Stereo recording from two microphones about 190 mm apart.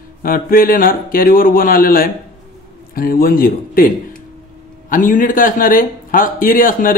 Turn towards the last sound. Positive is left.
turn(degrees=45)  # may be behind; listen again after turning